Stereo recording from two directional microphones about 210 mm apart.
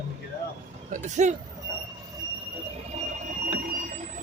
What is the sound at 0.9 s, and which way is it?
Speech, 35° right (ahead or behind).